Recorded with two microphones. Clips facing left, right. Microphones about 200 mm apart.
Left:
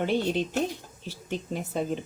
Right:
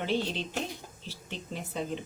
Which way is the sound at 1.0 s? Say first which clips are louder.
Left 8 dB; 50° left (ahead or behind).